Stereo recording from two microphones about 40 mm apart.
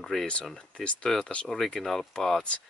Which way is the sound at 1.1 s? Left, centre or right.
Centre.